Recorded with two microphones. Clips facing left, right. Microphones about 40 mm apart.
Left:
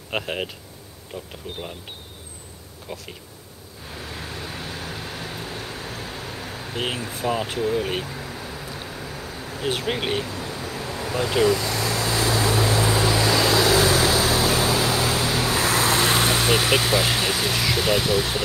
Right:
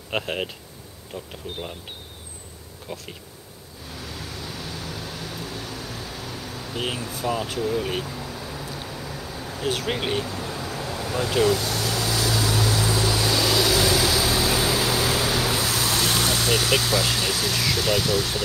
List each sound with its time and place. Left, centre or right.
0.1 s speech: centre
2.9 s speech: centre
4.1 s vehicle: left
7.1 s speech: left
8.7 s a sound: left
9.8 s speech: centre
10.6 s vehicle: left
11.6 s vehicle: left